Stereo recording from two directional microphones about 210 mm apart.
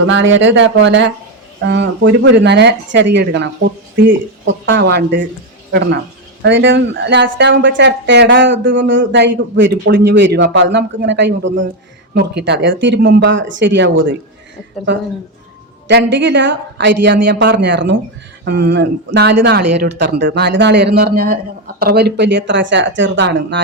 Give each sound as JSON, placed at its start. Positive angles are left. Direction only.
{"t": 0.0, "sound": "speech", "side_deg": -65}
{"t": 15.9, "sound": "speech", "side_deg": -55}